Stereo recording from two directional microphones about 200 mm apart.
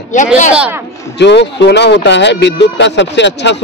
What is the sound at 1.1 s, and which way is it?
Speech, 60° left (ahead or behind).